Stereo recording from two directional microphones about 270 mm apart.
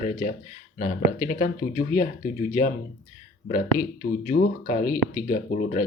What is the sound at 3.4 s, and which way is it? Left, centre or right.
Speech, left.